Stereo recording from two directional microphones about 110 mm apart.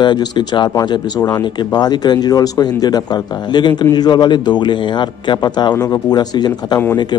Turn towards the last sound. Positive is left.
turn(degrees=40)  # may be behind; listen again after turning